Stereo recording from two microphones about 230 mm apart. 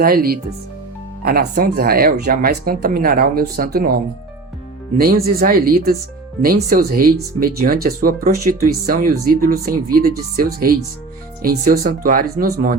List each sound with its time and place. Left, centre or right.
0.0 s speech: right